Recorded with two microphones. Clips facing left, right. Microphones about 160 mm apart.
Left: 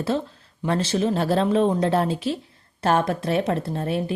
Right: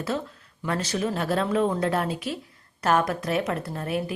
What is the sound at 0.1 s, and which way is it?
A woman's voice, 30° left (ahead or behind).